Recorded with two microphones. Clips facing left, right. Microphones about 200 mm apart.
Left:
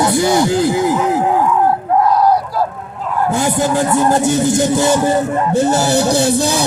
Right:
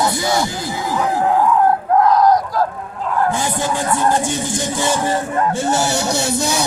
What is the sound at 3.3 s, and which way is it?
Speech, 40° left (ahead or behind).